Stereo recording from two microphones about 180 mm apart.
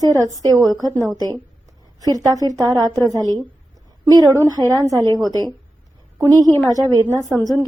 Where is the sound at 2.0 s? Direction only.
20° right (ahead or behind).